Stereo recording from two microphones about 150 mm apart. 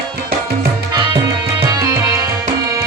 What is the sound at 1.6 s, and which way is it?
Music, 25° right (ahead or behind).